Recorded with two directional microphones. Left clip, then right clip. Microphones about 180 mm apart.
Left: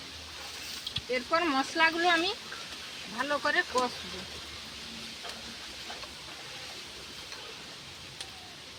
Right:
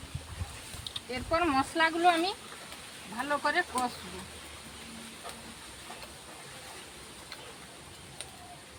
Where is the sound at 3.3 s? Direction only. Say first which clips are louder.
Even; 40° right (ahead or behind).